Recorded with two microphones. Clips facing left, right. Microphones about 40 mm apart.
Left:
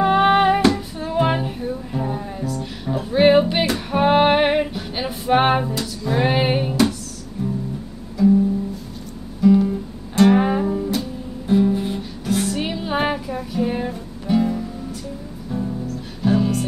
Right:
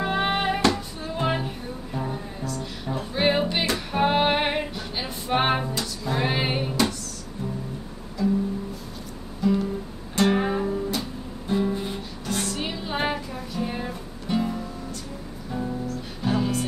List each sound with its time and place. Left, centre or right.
0.0 s music: centre
8.2 s music: centre
9.4 s music: centre
10.4 s music: centre
11.0 s music: centre
15.5 s music: centre
16.3 s music: centre